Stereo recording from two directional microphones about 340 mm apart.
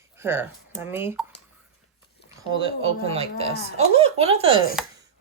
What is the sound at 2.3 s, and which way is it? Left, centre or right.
Speech, centre.